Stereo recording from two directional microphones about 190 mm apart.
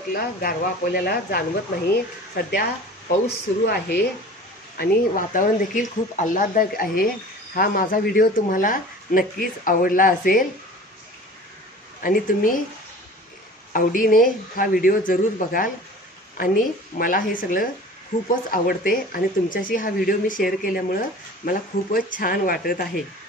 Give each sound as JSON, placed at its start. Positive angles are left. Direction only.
{"t": 0.1, "sound": "speech", "side_deg": 50}
{"t": 4.7, "sound": "speech", "side_deg": 45}
{"t": 12.0, "sound": "speech", "side_deg": 45}
{"t": 13.7, "sound": "speech", "side_deg": 45}